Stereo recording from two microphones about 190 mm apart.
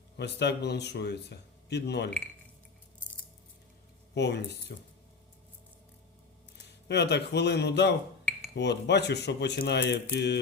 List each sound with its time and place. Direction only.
0.2 s speech: 60° left (ahead or behind)
4.1 s speech: 65° left (ahead or behind)
6.8 s speech: 65° left (ahead or behind)